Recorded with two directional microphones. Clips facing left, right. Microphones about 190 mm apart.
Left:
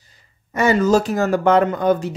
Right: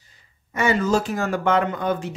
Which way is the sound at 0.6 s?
40° left (ahead or behind).